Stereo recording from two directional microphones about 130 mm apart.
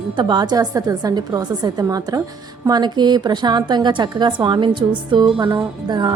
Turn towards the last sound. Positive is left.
turn(degrees=-35)  # may be behind; listen again after turning